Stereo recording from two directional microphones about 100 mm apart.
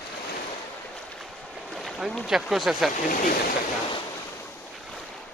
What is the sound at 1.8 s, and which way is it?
Speech, centre (ahead or behind).